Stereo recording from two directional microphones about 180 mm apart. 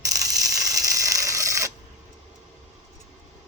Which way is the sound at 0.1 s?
20° right (ahead or behind).